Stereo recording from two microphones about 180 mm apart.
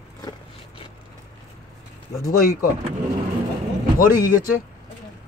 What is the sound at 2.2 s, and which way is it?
Speech, 50° left (ahead or behind).